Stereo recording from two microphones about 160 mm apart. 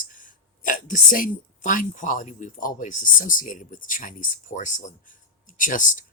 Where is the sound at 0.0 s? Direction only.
55° left (ahead or behind).